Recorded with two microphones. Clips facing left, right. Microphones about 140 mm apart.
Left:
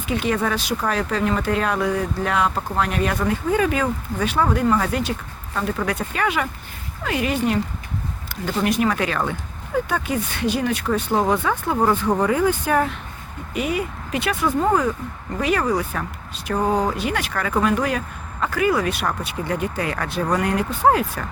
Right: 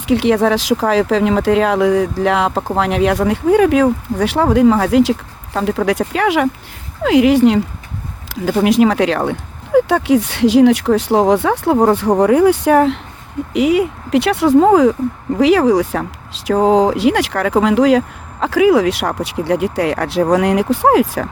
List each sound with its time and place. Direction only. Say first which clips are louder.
0.0 s speech: right 9 dB; 80° right
13.5 s speech: right 10 dB; 90° right